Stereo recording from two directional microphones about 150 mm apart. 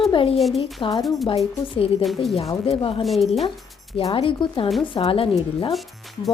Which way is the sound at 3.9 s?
40° left (ahead or behind).